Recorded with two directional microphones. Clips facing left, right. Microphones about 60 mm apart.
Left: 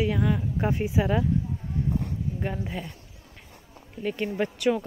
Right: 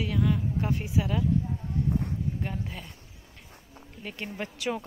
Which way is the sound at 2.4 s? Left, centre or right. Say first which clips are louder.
Left 4 dB; centre.